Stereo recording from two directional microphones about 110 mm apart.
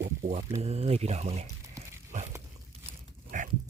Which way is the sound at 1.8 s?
30° right (ahead or behind).